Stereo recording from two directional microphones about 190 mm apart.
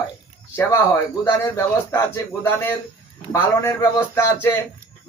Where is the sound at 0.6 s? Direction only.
15° left (ahead or behind).